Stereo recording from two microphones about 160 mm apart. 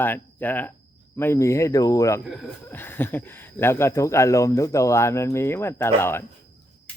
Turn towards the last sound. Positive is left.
turn(degrees=15)  # may be behind; listen again after turning